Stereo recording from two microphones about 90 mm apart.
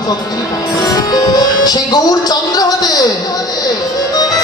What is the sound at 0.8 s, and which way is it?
Speech, 45° left (ahead or behind).